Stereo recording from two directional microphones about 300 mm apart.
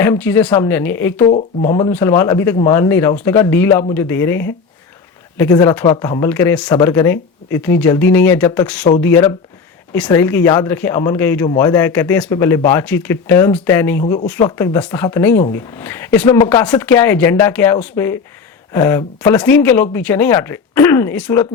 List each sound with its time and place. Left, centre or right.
0.0 s speech: centre
1.2 s speech: left
1.6 s speech: centre
14.0 s speech: centre
14.3 s speech: centre